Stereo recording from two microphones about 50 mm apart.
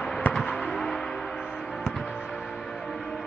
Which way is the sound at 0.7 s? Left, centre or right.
Centre.